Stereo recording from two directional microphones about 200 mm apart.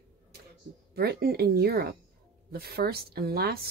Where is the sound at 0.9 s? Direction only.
50° right (ahead or behind).